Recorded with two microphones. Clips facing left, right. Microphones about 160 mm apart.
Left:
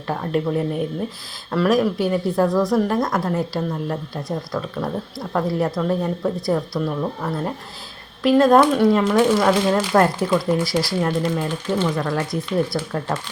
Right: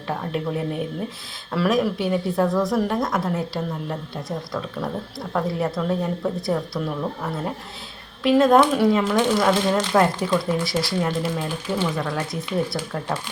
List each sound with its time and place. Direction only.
0.1 s speech: centre (ahead or behind)